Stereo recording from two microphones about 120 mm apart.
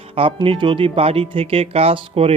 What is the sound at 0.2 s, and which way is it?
Speech, 50° right (ahead or behind).